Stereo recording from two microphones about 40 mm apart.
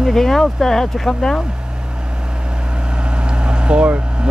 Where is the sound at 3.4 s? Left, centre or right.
Right.